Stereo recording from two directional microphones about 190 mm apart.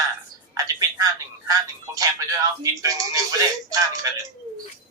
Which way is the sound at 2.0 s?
20° right (ahead or behind).